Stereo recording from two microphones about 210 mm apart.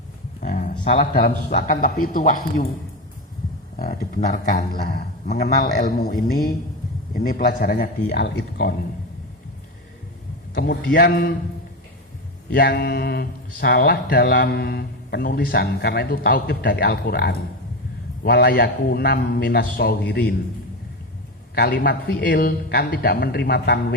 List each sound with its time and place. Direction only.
0.3 s speech: 35° left (ahead or behind)
3.8 s a man's voice: 45° left (ahead or behind)
10.5 s speech: 45° left (ahead or behind)
12.5 s speech: 50° left (ahead or behind)
21.5 s speech: 45° left (ahead or behind)